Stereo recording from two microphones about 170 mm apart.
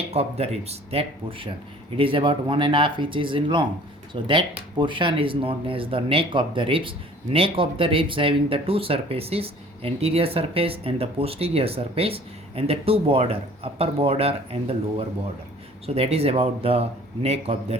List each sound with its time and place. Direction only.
0.1 s speech: 35° right (ahead or behind)